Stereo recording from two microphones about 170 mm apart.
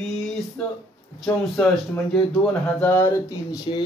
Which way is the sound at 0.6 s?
5° left (ahead or behind).